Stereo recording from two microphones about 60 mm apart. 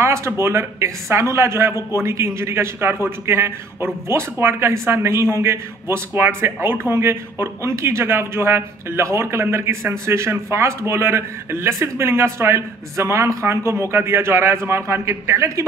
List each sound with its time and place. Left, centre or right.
0.0 s a man's voice: right